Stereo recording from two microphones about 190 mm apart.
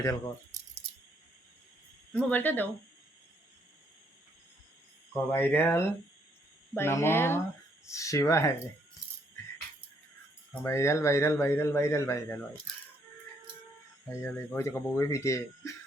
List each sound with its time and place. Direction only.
0.0 s speech: 20° left (ahead or behind)
2.1 s a man's voice: 10° left (ahead or behind)
5.1 s a man's voice: 10° left (ahead or behind)
10.6 s a man's voice: 15° left (ahead or behind)
14.1 s a man's voice: 15° left (ahead or behind)